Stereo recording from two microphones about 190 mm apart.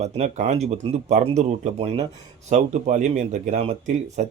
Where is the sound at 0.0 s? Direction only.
35° right (ahead or behind).